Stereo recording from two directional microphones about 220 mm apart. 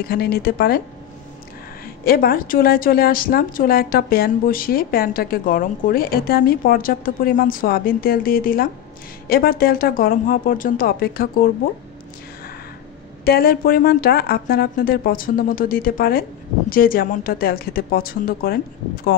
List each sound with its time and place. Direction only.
0.0 s a woman's voice: 45° left (ahead or behind)
2.0 s a woman's voice: 40° left (ahead or behind)
13.2 s a woman's voice: 45° left (ahead or behind)